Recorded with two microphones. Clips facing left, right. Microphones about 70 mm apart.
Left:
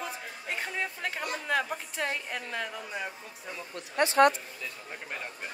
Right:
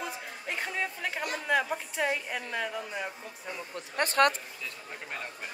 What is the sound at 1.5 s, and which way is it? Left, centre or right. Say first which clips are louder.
A man's voice: right 2 dB; centre.